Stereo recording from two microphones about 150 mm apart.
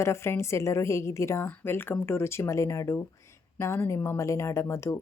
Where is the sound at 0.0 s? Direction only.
15° left (ahead or behind).